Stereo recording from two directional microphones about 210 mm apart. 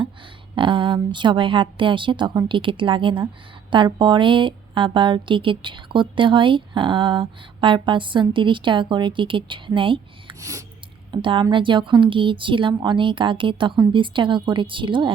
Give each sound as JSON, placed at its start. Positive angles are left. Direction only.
{"t": 0.5, "sound": "a woman's voice", "side_deg": -25}